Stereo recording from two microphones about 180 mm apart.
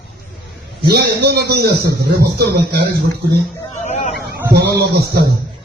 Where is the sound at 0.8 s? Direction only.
65° right (ahead or behind).